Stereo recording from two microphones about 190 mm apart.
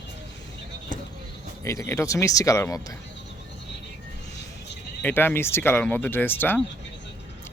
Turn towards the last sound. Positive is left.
turn(degrees=10)  # may be behind; listen again after turning